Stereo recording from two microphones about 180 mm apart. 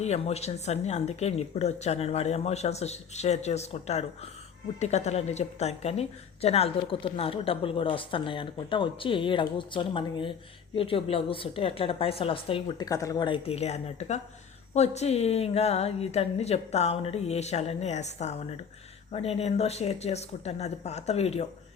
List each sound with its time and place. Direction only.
0.0 s a woman's voice: 35° left (ahead or behind)